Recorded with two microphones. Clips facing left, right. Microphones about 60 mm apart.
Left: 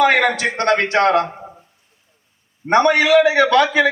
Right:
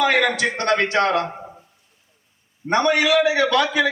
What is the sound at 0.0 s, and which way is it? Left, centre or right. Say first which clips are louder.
A man's voice: left 3 dB; left.